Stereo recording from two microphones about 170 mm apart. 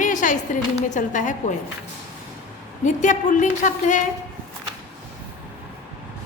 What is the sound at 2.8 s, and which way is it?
A woman's voice, 45° left (ahead or behind).